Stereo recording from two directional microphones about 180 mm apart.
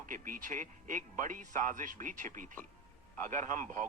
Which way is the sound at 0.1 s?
50° right (ahead or behind).